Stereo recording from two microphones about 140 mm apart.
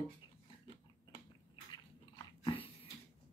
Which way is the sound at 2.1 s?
35° left (ahead or behind).